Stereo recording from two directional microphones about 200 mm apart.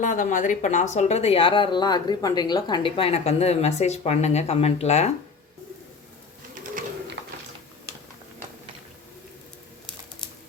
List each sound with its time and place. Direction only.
0.0 s speech: 40° left (ahead or behind)
7.2 s music: 60° right (ahead or behind)